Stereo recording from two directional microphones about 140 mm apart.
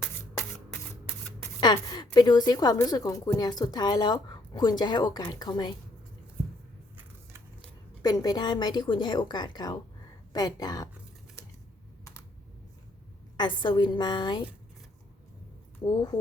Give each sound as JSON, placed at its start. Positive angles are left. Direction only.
{"t": 1.6, "sound": "a woman's voice", "side_deg": 30}
{"t": 8.0, "sound": "a woman's voice", "side_deg": 30}
{"t": 13.3, "sound": "speech", "side_deg": 30}